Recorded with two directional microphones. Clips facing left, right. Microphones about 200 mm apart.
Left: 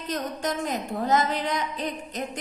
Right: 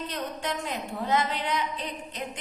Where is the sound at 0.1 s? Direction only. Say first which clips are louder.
Left 4 dB; 45° left (ahead or behind).